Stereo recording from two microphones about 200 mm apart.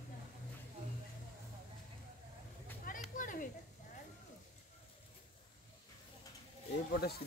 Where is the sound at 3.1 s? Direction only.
40° left (ahead or behind).